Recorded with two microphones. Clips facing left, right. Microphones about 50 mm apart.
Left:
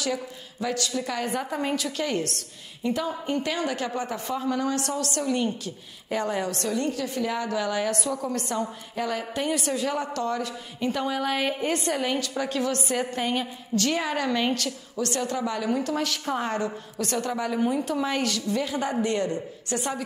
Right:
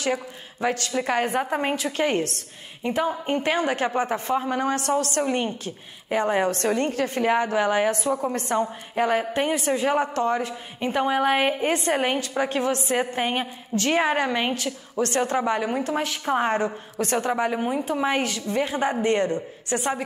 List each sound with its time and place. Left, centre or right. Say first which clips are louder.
0.0 s a woman's voice: right 3 dB; right
15.0 s a woman's voice: right 5 dB; right